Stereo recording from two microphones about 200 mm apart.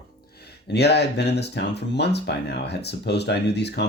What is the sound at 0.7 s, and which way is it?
Speech, 55° left (ahead or behind).